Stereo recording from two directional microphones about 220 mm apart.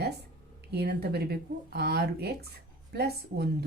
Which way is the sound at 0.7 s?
50° right (ahead or behind).